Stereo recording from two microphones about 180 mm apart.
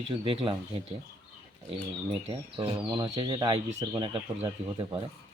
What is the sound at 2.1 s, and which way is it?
Speech, 30° right (ahead or behind).